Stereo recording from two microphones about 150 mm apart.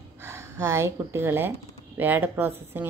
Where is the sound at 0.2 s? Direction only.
15° right (ahead or behind).